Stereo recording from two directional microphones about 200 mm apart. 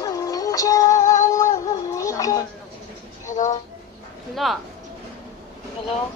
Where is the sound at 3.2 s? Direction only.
35° left (ahead or behind).